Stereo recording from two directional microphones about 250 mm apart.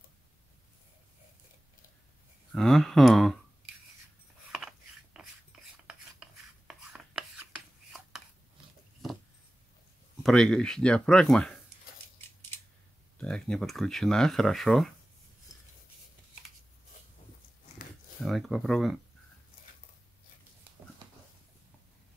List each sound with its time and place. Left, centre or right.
2.5 s speech: centre
4.6 s a sound: centre
10.2 s speech: centre
13.2 s speech: centre
17.8 s a sound: left
18.2 s speech: centre